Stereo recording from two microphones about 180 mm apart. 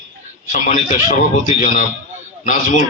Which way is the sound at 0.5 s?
40° left (ahead or behind).